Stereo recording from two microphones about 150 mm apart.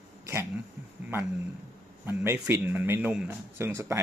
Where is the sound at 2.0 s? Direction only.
15° right (ahead or behind).